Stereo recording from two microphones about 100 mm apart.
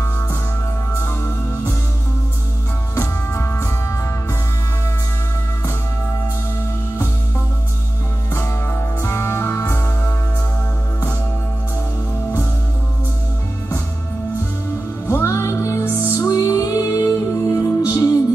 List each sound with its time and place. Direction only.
0.9 s music: 25° left (ahead or behind)
3.0 s music: 30° left (ahead or behind)
8.3 s music: 25° left (ahead or behind)
15.0 s music: 25° left (ahead or behind)
16.3 s music: 35° left (ahead or behind)